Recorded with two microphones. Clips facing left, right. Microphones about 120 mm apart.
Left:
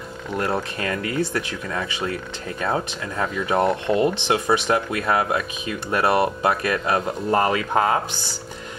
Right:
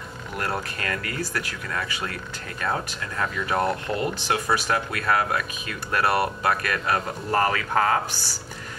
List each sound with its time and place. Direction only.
0.4 s speech: 25° left (ahead or behind)